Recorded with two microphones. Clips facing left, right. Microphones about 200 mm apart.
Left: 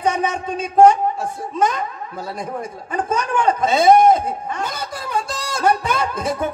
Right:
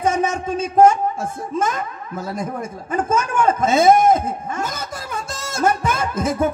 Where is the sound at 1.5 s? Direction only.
45° right (ahead or behind).